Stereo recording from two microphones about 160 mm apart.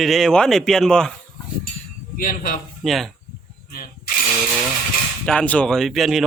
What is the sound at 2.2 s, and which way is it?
Speech, 60° left (ahead or behind).